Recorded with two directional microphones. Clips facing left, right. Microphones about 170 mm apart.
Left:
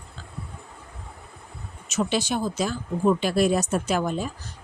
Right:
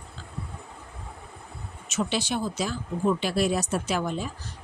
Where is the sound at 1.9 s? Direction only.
45° left (ahead or behind).